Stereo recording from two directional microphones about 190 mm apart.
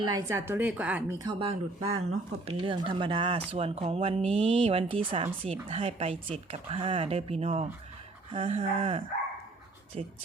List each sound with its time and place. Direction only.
0.0 s a woman's voice: 20° right (ahead or behind)
1.2 s speech: 25° right (ahead or behind)